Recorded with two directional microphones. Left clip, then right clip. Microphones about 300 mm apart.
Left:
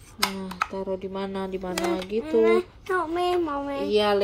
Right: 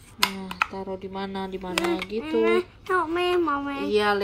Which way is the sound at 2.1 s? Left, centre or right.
Centre.